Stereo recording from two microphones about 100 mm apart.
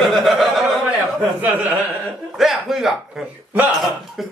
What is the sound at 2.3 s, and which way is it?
A man's voice, centre (ahead or behind).